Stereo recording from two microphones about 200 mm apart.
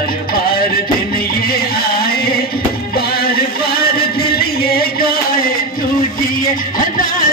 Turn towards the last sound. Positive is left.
turn(degrees=45)  # may be behind; listen again after turning